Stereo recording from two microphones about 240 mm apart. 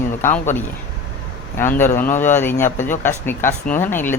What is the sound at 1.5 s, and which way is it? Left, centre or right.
Speech, centre.